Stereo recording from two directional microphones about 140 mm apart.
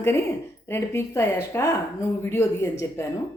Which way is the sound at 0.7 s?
20° left (ahead or behind).